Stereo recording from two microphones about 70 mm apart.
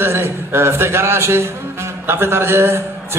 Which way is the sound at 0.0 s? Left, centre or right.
Right.